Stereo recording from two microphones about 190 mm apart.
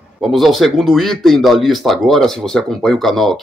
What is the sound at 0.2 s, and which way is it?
Speech, centre (ahead or behind).